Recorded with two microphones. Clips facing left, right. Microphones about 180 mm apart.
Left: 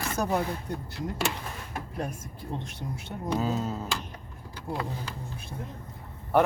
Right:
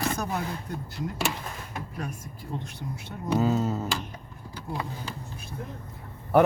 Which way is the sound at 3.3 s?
5° right (ahead or behind).